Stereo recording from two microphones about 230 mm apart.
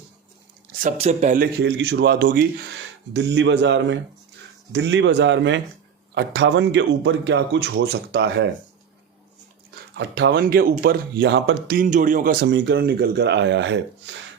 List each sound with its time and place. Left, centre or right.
0.8 s speech: right
1.5 s speech: right
10.0 s speech: right